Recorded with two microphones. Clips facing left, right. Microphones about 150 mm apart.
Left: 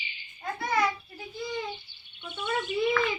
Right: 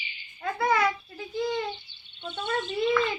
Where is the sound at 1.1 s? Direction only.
90° right.